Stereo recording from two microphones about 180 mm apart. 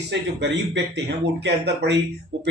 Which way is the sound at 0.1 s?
75° right (ahead or behind).